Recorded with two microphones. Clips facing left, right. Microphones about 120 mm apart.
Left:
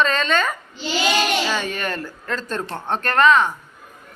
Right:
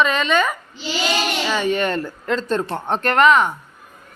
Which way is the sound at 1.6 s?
20° right (ahead or behind).